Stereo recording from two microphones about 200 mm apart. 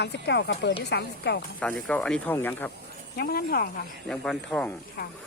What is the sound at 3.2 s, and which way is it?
Speech, 50° left (ahead or behind).